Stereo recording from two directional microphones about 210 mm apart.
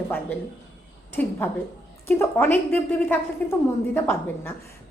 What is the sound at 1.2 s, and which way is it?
A woman's voice, 10° left (ahead or behind).